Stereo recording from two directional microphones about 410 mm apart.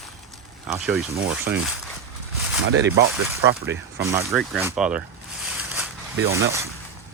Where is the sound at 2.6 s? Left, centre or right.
Right.